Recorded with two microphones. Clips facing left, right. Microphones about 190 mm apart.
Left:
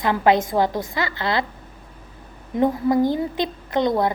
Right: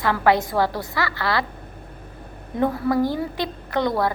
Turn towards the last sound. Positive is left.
turn(degrees=20)  # may be behind; listen again after turning